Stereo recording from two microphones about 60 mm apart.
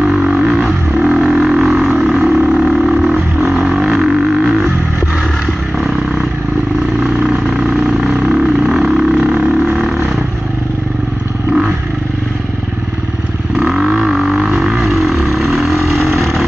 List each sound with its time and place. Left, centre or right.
0.0 s a sound: centre
7.0 s vehicle: centre
13.7 s vehicle: centre
16.0 s vehicle: right